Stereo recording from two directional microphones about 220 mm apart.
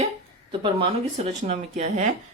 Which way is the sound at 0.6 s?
25° right (ahead or behind).